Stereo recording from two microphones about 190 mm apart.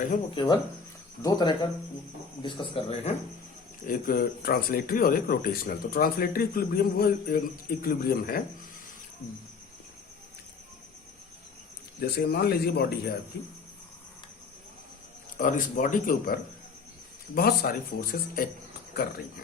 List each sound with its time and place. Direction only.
0.3 s speech: 25° left (ahead or behind)
3.8 s speech: 50° left (ahead or behind)
11.9 s speech: 60° left (ahead or behind)
15.4 s speech: 45° left (ahead or behind)